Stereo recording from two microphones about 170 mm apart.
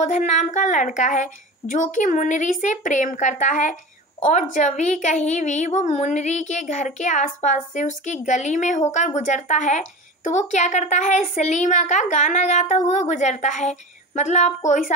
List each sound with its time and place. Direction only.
0.0 s a woman's voice: 40° left (ahead or behind)